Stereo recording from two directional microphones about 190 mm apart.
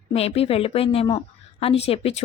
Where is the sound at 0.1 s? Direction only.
30° left (ahead or behind).